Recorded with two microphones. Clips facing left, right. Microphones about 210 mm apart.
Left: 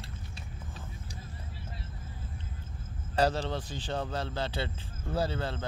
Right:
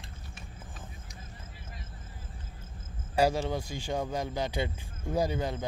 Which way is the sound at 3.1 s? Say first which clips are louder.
Right 2 dB; 10° right (ahead or behind).